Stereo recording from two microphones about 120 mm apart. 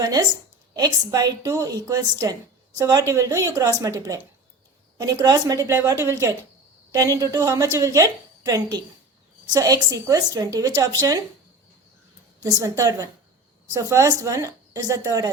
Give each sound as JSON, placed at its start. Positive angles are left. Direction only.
{"t": 0.0, "sound": "a woman's voice", "side_deg": -30}
{"t": 12.4, "sound": "a woman's voice", "side_deg": -30}